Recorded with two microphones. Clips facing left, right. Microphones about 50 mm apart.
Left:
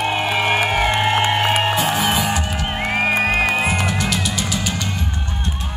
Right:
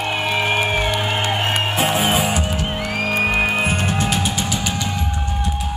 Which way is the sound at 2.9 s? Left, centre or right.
Left.